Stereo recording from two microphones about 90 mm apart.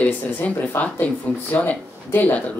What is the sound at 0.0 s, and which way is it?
Speech, 15° left (ahead or behind).